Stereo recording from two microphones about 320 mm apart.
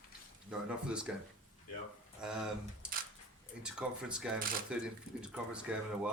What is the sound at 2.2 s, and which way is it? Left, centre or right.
Speech, centre.